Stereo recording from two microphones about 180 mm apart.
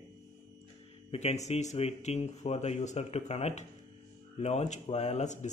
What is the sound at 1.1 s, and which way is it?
Speech, 35° left (ahead or behind).